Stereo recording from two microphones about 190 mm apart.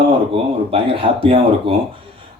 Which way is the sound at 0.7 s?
30° right (ahead or behind).